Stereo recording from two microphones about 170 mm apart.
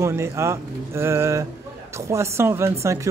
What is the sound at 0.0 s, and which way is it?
Speech, 15° right (ahead or behind).